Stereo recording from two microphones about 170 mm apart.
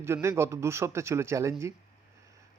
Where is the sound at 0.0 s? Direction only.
15° right (ahead or behind).